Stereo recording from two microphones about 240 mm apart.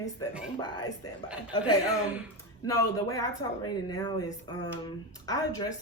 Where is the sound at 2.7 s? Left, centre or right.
Centre.